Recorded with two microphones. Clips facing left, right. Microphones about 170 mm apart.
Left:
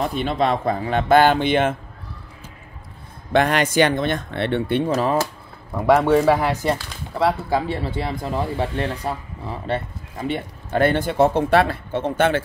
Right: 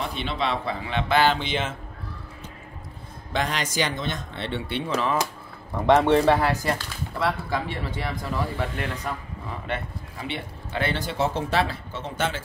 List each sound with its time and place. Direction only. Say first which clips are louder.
0.0 s speech: left 7 dB; 45° left (ahead or behind)
3.3 s speech: left 9 dB; 60° left (ahead or behind); by 5.1 s 40° left (ahead or behind)
5.8 s a man's voice: left 2 dB; 5° left (ahead or behind)
6.4 s speech: left 3 dB; 20° left (ahead or behind)
10.2 s speech: left 8 dB; 45° left (ahead or behind)